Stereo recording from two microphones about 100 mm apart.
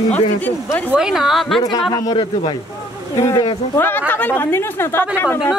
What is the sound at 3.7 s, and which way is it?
A woman's voice, 20° left (ahead or behind).